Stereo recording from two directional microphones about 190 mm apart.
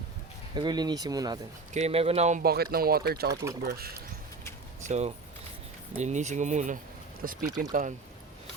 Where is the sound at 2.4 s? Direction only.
55° right (ahead or behind).